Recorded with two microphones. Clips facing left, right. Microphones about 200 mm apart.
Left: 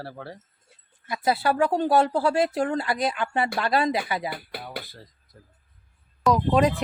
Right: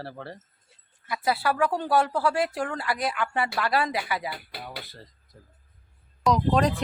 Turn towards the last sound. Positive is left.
turn(degrees=5)  # may be behind; listen again after turning